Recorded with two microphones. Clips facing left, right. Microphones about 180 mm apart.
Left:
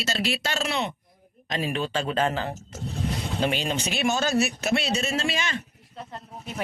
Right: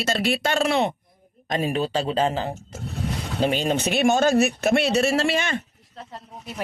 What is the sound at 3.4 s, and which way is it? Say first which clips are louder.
Speech: right 6 dB; 45° right (ahead or behind).